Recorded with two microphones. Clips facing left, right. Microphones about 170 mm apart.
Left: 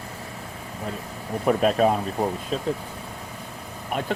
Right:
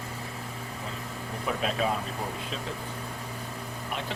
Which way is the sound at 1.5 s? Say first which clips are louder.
Left 10 dB; 45° left (ahead or behind).